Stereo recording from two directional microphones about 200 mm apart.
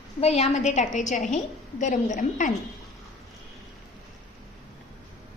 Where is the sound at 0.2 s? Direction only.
30° left (ahead or behind).